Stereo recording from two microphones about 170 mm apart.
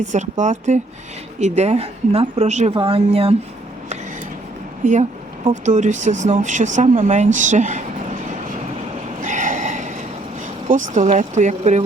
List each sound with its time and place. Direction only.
0.0 s a woman's voice: 45° right (ahead or behind)
4.8 s speech: 50° right (ahead or behind)
9.2 s a sound: 45° right (ahead or behind)
10.7 s speech: 45° right (ahead or behind)